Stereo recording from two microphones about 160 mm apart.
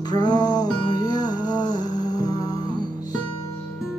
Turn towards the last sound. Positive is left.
turn(degrees=25)  # may be behind; listen again after turning